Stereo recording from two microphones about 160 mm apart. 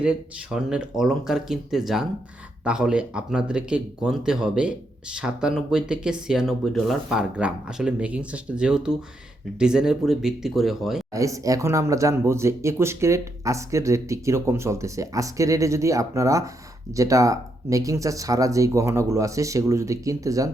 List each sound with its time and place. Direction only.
0.0 s speech: 5° right (ahead or behind)
11.1 s speech: 20° right (ahead or behind)